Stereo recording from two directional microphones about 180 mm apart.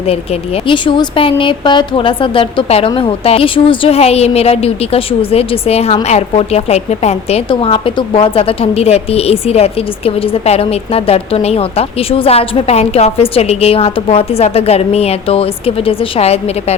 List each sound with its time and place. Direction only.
0.7 s a woman's voice: 25° left (ahead or behind)